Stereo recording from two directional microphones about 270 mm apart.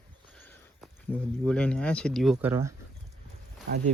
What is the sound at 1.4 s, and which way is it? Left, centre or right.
Speech, centre.